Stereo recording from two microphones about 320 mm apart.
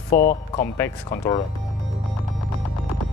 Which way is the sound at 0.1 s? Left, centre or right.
Left.